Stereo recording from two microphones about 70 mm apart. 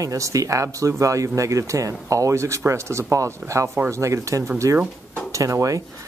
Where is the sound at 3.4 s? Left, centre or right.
Right.